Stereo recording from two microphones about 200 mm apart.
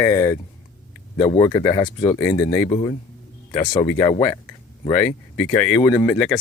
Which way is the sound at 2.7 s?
25° left (ahead or behind).